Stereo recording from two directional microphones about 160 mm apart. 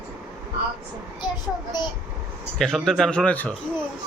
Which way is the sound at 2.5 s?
5° left (ahead or behind).